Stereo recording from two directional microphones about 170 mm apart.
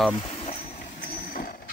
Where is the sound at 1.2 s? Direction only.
60° left (ahead or behind).